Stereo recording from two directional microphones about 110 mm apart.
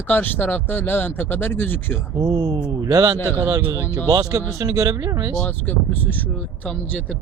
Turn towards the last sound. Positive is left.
turn(degrees=10)  # may be behind; listen again after turning